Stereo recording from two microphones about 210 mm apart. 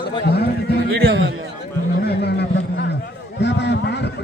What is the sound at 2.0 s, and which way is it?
Speech, 50° left (ahead or behind).